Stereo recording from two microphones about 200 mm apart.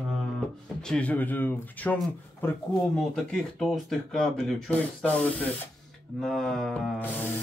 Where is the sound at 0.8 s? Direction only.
5° left (ahead or behind).